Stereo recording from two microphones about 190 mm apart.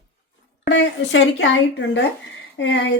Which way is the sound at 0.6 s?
80° left.